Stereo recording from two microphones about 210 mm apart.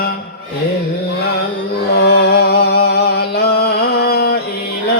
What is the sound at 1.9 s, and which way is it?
Music, 50° left (ahead or behind).